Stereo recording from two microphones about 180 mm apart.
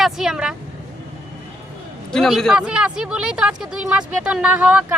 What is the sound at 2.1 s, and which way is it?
Speech, 5° left (ahead or behind).